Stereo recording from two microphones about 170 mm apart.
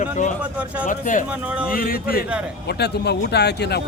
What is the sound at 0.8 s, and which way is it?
A man's voice, 50° left (ahead or behind).